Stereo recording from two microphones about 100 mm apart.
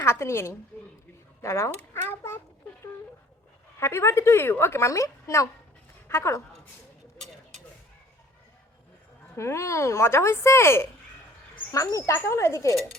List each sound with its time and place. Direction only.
0.0 s a woman's voice: 25° left (ahead or behind)
1.4 s a sound: 25° left (ahead or behind)
3.8 s a woman's voice: 25° left (ahead or behind)
9.3 s a woman's voice: 25° left (ahead or behind)